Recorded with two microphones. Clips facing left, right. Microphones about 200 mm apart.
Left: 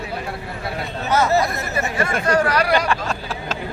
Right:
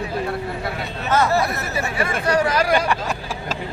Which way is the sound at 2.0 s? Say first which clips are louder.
Left 1 dB; 5° right (ahead or behind).